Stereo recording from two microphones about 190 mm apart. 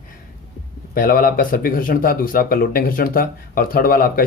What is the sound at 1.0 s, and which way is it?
Speech, 50° left (ahead or behind).